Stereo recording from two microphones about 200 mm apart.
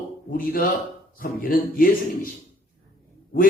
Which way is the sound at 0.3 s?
45° left (ahead or behind).